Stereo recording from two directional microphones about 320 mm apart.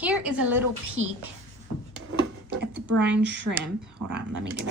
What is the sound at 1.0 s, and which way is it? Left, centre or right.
Speech, right.